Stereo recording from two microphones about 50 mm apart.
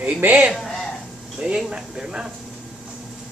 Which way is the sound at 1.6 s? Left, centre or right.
Centre.